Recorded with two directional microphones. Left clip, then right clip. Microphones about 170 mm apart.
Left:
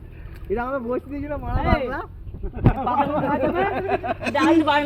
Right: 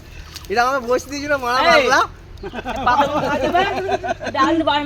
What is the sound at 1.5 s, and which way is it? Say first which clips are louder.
Speech: right 11 dB; 35° right (ahead or behind).